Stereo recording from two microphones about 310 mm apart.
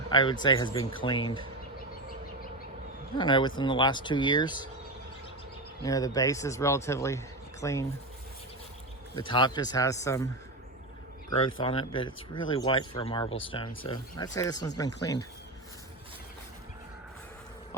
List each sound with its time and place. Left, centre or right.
0.1 s speech: centre
3.2 s speech: centre
5.8 s speech: centre
9.1 s speech: centre
11.4 s speech: centre